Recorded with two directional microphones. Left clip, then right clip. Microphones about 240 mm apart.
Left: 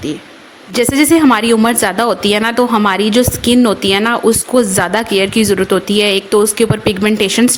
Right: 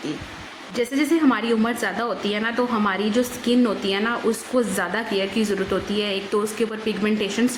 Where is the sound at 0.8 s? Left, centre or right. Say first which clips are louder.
Left 11 dB; left.